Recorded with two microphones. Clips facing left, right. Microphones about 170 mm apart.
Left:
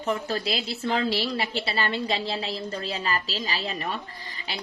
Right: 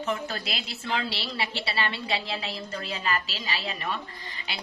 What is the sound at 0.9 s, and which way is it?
A woman's voice, 45° left (ahead or behind).